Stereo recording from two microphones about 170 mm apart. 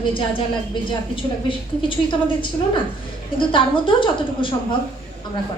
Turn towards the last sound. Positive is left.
turn(degrees=30)  # may be behind; listen again after turning